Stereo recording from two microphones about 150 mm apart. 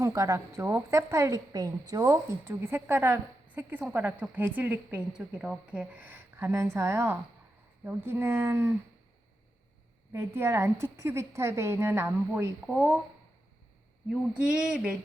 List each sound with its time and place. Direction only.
0.0 s a woman's voice: 20° right (ahead or behind)
10.1 s a woman's voice: 15° right (ahead or behind)
14.1 s a sound: 5° right (ahead or behind)